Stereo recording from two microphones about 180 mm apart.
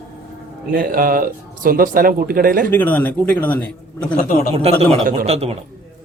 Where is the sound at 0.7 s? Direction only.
55° right (ahead or behind).